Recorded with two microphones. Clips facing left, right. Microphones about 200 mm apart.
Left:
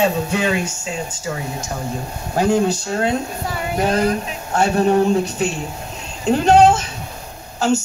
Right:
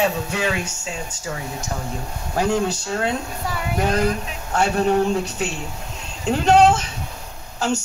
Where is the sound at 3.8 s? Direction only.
30° left (ahead or behind).